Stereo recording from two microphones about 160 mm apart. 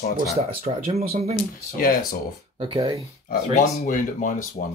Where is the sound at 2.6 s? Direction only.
35° right (ahead or behind).